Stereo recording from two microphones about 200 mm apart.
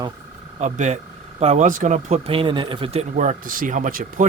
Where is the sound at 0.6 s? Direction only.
35° right (ahead or behind).